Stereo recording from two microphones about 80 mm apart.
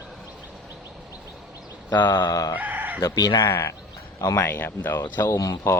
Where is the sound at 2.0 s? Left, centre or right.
Left.